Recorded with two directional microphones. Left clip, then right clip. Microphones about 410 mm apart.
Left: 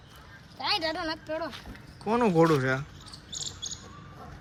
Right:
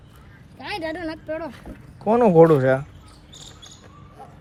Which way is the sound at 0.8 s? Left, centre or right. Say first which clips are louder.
Right 2 dB; right.